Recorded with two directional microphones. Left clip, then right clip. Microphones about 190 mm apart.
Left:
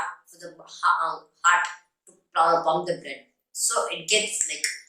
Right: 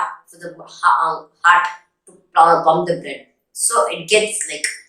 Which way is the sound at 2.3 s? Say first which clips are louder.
Right 9 dB; 5° left (ahead or behind).